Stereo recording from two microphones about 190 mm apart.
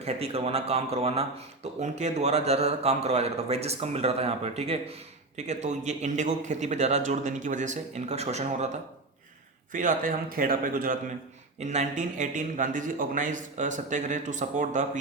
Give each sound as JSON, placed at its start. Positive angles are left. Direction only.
{"t": 0.0, "sound": "a man's voice", "side_deg": -30}
{"t": 9.7, "sound": "a man's voice", "side_deg": -45}
{"t": 11.6, "sound": "a man's voice", "side_deg": -35}